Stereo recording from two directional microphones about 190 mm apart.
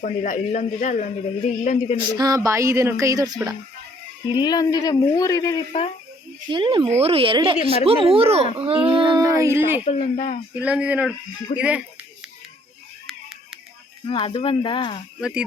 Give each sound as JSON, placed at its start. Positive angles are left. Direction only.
{"t": 0.0, "sound": "speech", "side_deg": 40}
{"t": 2.1, "sound": "speech", "side_deg": -20}
{"t": 4.4, "sound": "speech", "side_deg": 20}
{"t": 6.5, "sound": "speech", "side_deg": -25}
{"t": 9.8, "sound": "speech", "side_deg": 35}
{"t": 10.6, "sound": "speech", "side_deg": -5}
{"t": 14.1, "sound": "speech", "side_deg": 25}